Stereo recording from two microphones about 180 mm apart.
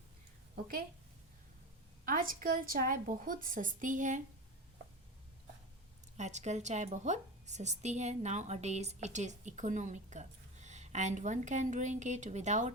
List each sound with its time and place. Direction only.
0.5 s a woman's voice: 50° right (ahead or behind)
2.0 s a woman's voice: 50° right (ahead or behind)
6.1 s a woman's voice: 40° right (ahead or behind)